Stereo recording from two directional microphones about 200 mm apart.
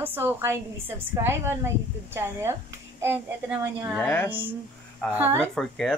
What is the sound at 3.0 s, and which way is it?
A woman's voice, 10° right (ahead or behind).